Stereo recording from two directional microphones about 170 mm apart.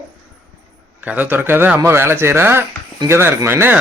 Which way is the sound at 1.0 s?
10° right (ahead or behind).